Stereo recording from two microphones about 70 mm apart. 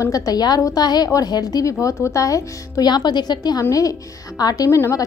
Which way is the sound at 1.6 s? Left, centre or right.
Left.